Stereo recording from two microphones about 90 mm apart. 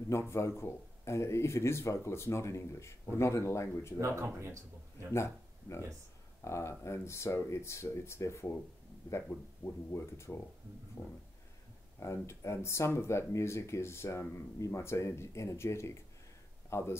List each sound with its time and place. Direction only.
0.1 s speech: 30° left (ahead or behind)
4.0 s a man's voice: 30° right (ahead or behind)
5.1 s speech: 30° left (ahead or behind)